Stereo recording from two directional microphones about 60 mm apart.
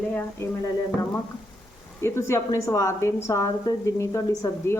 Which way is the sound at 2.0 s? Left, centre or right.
Left.